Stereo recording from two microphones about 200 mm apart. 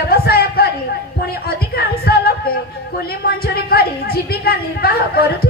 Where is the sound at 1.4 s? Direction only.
50° left (ahead or behind).